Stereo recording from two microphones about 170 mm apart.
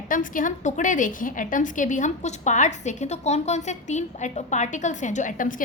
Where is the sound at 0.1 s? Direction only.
50° left (ahead or behind).